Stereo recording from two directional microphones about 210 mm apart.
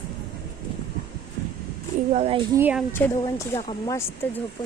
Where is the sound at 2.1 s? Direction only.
30° right (ahead or behind).